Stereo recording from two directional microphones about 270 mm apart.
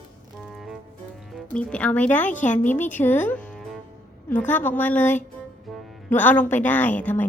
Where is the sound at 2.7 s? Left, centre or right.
Centre.